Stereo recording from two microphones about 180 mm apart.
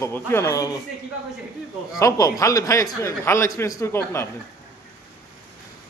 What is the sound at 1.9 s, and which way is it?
Speech, 20° left (ahead or behind).